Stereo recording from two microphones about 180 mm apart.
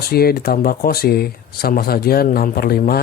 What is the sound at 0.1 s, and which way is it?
Speech, 60° left (ahead or behind).